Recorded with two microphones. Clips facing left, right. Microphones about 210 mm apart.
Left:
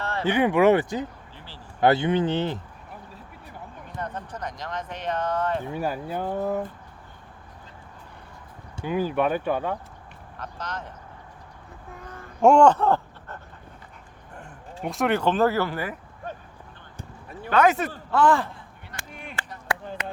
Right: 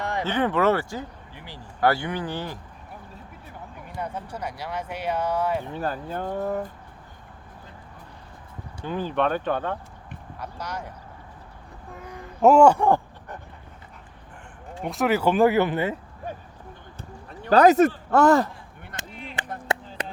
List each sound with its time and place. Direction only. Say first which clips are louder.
0.0 s a sound: right 2 dB; 15° right (ahead or behind)
0.3 s speech: left 4 dB; 15° left (ahead or behind)
1.4 s a sound: right 4 dB; 15° right (ahead or behind)
1.8 s speech: left 4 dB; 20° left (ahead or behind)
3.8 s speech: right 1 dB; 10° right (ahead or behind)
5.7 s speech: left 1 dB; 10° left (ahead or behind)
8.8 s speech: left 1 dB; 10° left (ahead or behind)
10.3 s speech: right 1 dB; 10° right (ahead or behind)
12.4 s speech: right 1 dB; 5° right (ahead or behind)
14.8 s speech: right 1 dB; centre (ahead or behind); by 16.0 s 20° right (ahead or behind)
17.0 s a sound: left 2 dB; 10° left (ahead or behind)
17.5 s speech: right 5 dB; 35° right (ahead or behind)
19.0 s a sound: right 3 dB; 20° right (ahead or behind)
19.4 s chop: right 5 dB; 20° right (ahead or behind)